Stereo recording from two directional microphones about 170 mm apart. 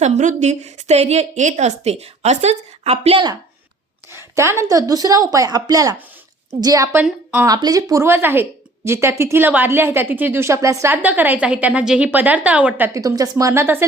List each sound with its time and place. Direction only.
0.0 s a woman's voice: 45° right (ahead or behind)
4.1 s a woman's voice: 15° right (ahead or behind)
7.0 s a woman's voice: 5° right (ahead or behind)
7.4 s speech: 20° right (ahead or behind)